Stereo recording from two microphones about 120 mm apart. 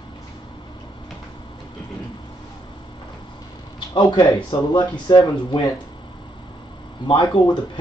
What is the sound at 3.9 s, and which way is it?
Speech, 40° left (ahead or behind).